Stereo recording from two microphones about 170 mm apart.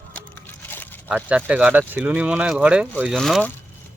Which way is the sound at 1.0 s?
10° right (ahead or behind).